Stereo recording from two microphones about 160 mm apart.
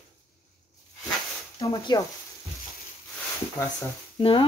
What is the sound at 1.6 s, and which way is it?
Speech, 25° left (ahead or behind).